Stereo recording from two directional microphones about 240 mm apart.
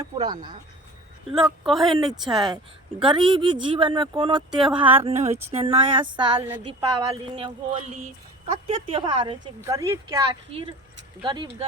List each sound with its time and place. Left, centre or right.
0.0 s speech: centre
1.3 s speech: centre
3.0 s speech: centre